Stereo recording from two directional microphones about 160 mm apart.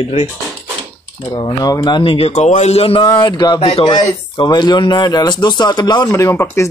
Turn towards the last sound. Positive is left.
turn(degrees=15)  # may be behind; listen again after turning